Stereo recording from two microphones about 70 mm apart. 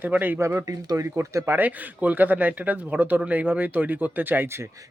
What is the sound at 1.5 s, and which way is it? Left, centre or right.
Speech, right.